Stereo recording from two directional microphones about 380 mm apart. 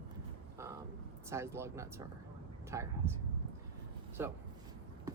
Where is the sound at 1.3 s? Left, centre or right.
Centre.